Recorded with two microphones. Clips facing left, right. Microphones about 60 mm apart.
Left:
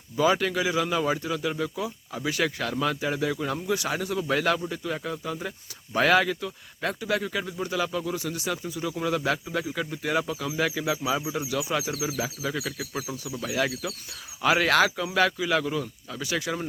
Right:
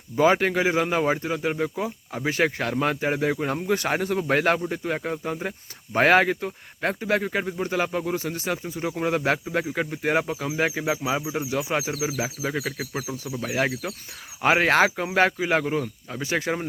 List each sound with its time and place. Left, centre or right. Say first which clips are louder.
0.2 s speech: right 4 dB; right